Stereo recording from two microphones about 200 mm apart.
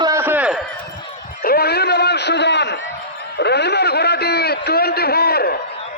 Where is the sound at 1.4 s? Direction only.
50° left (ahead or behind).